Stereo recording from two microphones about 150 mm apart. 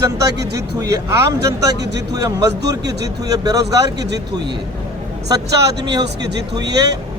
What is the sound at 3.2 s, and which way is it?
Speech, 25° right (ahead or behind).